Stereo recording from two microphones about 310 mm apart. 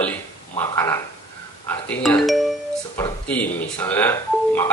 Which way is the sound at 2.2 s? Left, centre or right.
Centre.